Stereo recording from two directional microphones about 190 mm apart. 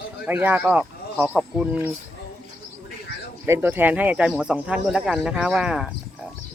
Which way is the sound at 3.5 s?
10° right (ahead or behind).